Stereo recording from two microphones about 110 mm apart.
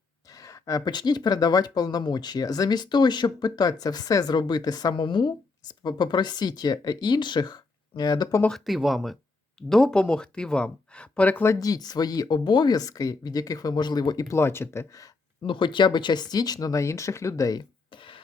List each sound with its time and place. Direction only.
0.3 s speech: 30° left (ahead or behind)
8.4 s speech: 5° left (ahead or behind)
11.6 s speech: 35° left (ahead or behind)
15.4 s speech: 45° left (ahead or behind); by 17.6 s 30° left (ahead or behind)
17.9 s music: 50° left (ahead or behind)